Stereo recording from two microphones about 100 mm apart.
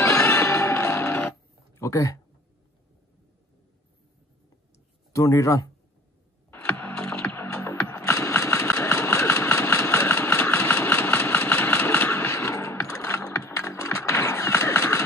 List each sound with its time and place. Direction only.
0.0 s music: 25° left (ahead or behind)
1.8 s speech: 30° left (ahead or behind)
5.1 s speech: 30° left (ahead or behind)
6.5 s music: 15° left (ahead or behind)
7.4 s music: 30° left (ahead or behind)
7.9 s engine: 30° left (ahead or behind)